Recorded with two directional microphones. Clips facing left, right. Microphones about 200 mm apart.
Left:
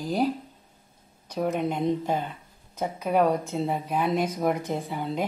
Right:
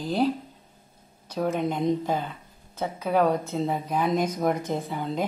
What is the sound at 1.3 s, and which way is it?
Speech, 5° left (ahead or behind).